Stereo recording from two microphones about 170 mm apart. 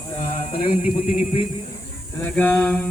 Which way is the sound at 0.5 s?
35° left (ahead or behind).